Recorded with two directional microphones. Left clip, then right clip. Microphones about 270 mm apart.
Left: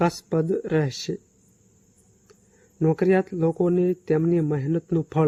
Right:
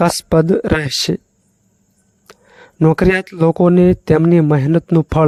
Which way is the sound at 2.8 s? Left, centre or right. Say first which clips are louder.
Right 7 dB; right.